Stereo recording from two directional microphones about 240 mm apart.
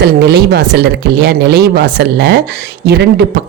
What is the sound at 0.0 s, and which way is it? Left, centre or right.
Speech, right.